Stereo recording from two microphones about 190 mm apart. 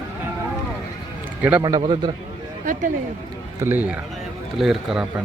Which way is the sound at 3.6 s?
10° right (ahead or behind).